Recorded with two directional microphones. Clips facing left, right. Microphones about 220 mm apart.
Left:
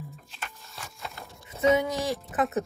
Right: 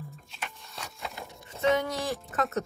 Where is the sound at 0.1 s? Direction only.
Centre (ahead or behind).